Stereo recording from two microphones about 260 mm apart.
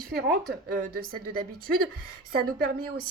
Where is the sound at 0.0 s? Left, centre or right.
Right.